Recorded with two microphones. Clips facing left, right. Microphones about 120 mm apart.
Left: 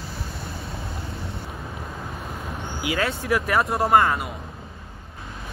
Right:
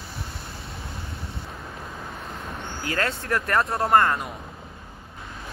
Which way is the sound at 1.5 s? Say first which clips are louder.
Left 2 dB; centre (ahead or behind).